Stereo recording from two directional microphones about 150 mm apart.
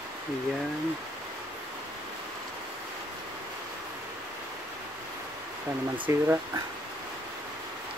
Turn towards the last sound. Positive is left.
turn(degrees=-15)  # may be behind; listen again after turning